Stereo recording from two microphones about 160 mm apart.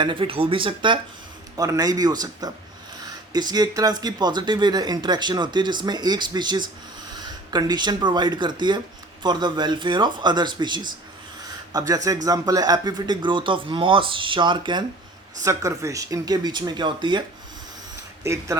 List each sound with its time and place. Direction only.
0.0 s a man's voice: 30° right (ahead or behind)